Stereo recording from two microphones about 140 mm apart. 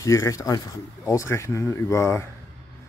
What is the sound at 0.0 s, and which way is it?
Speech, 20° left (ahead or behind).